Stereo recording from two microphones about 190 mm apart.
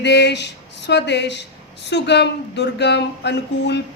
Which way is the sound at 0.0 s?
65° left (ahead or behind).